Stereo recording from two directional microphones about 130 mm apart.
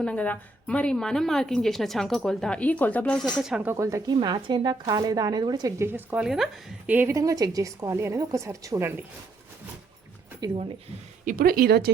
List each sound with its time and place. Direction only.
0.0 s a woman's voice: 10° left (ahead or behind)
3.7 s speech: 25° right (ahead or behind)
5.8 s speech: 15° right (ahead or behind)
6.2 s a woman's voice: 5° right (ahead or behind)
6.9 s speech: 20° right (ahead or behind)
10.4 s speech: 35° right (ahead or behind)